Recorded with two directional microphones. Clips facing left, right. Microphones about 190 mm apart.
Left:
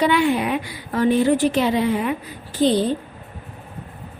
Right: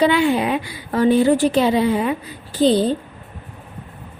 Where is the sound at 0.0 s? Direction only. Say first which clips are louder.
Right 2 dB; 30° right (ahead or behind).